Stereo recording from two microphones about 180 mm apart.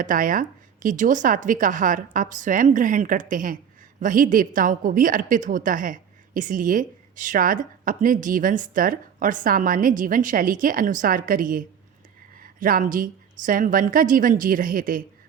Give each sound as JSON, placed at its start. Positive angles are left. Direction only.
{"t": 0.0, "sound": "a woman's voice", "side_deg": -50}